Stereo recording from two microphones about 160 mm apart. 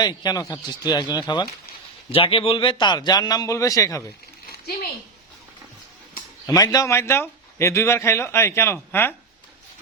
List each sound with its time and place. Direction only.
0.0 s a man's voice: 25° left (ahead or behind)
4.5 s a sound: 75° left (ahead or behind)
6.4 s a man's voice: 25° left (ahead or behind)